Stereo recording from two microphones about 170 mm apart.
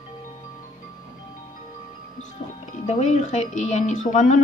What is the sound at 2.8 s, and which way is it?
A woman's voice, 40° left (ahead or behind).